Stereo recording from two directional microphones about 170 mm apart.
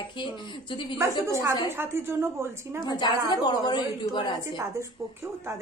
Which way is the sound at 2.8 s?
25° left (ahead or behind).